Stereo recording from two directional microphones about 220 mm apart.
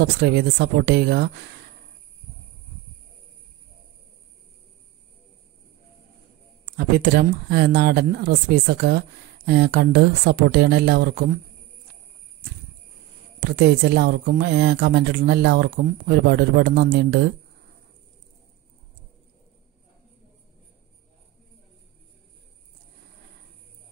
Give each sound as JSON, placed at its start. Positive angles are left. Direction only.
{"t": 0.0, "sound": "speech", "side_deg": -50}
{"t": 6.6, "sound": "speech", "side_deg": -45}
{"t": 13.4, "sound": "speech", "side_deg": -45}